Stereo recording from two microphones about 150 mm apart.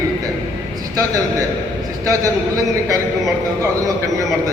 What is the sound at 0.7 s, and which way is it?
A man's voice, 25° right (ahead or behind).